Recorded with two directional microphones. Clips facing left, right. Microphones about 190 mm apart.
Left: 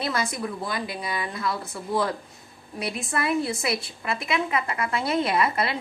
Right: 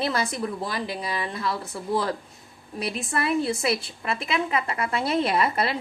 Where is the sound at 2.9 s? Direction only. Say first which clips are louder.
Even; 30° right (ahead or behind).